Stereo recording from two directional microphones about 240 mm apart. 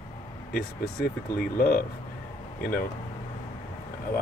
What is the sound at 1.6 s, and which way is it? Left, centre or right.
Speech, left.